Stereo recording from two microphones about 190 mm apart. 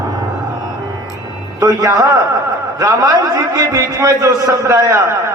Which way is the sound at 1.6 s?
15° right (ahead or behind).